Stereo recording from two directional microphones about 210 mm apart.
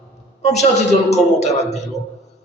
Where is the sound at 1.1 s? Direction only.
30° left (ahead or behind).